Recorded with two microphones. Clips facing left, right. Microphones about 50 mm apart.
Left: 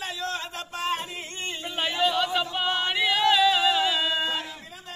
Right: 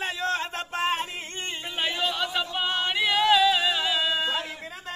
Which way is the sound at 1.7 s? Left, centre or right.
Centre.